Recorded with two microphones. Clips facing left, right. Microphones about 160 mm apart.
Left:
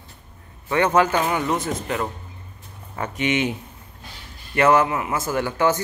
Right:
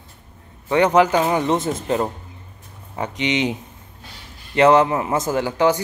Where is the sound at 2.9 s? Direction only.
15° right (ahead or behind).